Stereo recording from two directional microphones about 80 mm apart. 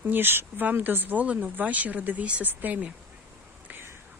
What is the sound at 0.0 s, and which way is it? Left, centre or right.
A woman's voice, right.